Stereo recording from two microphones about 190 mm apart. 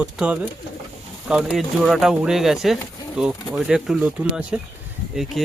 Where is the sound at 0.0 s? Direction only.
5° right (ahead or behind).